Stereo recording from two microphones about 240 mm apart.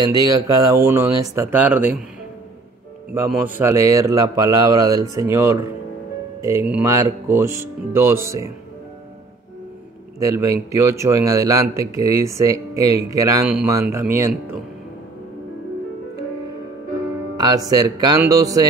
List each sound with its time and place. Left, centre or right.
0.0 s a man's voice: centre
3.1 s a man's voice: centre
10.1 s a man's voice: centre
17.4 s a man's voice: centre